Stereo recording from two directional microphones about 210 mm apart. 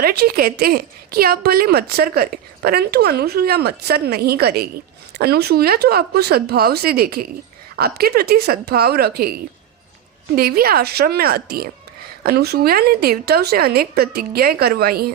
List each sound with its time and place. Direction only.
0.0 s a woman's voice: 45° right (ahead or behind)
10.3 s a woman's voice: 45° right (ahead or behind)